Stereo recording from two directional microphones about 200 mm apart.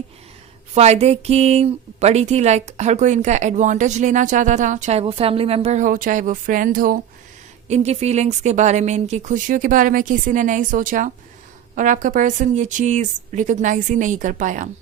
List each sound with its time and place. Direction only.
0.7 s speech: 35° right (ahead or behind)
7.7 s speech: 35° right (ahead or behind)